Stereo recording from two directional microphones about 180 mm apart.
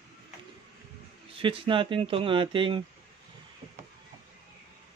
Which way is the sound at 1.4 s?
30° right (ahead or behind).